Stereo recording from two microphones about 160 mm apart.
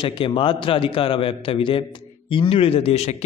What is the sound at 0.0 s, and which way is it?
A man's voice, 35° left (ahead or behind).